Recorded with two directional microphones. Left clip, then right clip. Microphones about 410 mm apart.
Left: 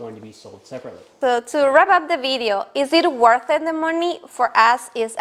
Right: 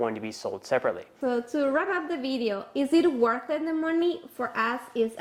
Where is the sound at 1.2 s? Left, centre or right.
Left.